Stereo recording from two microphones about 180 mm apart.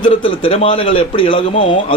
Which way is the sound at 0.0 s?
30° left (ahead or behind).